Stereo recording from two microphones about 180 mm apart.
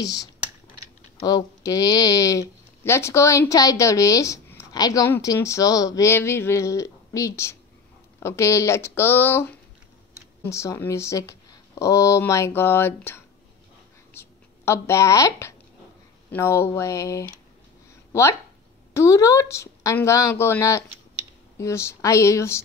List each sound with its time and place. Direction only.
0.0 s speech: 20° left (ahead or behind)
18.9 s speech: 15° left (ahead or behind)